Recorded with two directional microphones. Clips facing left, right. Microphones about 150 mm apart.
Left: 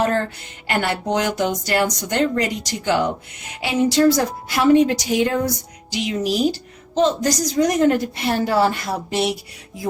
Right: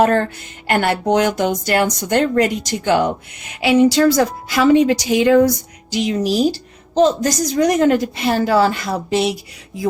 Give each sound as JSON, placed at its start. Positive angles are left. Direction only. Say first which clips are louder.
{"t": 0.0, "sound": "a woman's voice", "louder": "right 5 dB", "side_deg": -60}
{"t": 3.6, "sound": "a woman's voice", "louder": "right 4 dB", "side_deg": -75}
{"t": 5.9, "sound": "a woman's voice", "louder": "right 4 dB", "side_deg": -40}
{"t": 7.5, "sound": "a woman's voice", "louder": "right 3 dB", "side_deg": -70}